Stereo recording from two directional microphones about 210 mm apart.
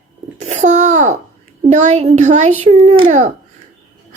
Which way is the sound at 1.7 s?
35° right (ahead or behind).